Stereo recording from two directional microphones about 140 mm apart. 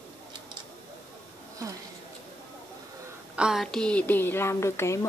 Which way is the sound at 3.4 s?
5° right (ahead or behind).